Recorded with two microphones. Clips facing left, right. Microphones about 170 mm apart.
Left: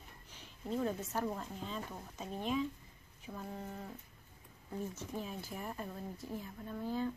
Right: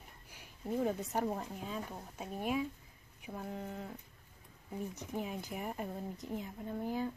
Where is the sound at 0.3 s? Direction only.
10° right (ahead or behind).